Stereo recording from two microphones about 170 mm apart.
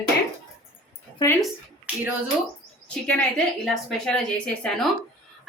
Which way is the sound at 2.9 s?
5° left (ahead or behind).